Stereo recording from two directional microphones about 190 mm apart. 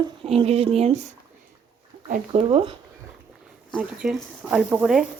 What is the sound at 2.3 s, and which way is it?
Speech, 30° right (ahead or behind).